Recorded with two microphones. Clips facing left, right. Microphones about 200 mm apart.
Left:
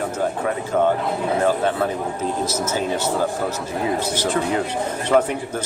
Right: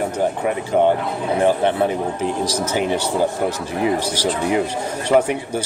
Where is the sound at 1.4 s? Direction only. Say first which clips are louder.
Right 4 dB; 20° right (ahead or behind).